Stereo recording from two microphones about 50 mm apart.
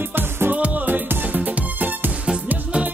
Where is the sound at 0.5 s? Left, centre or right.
Right.